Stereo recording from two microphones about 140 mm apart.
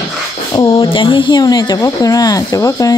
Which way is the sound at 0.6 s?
40° left (ahead or behind).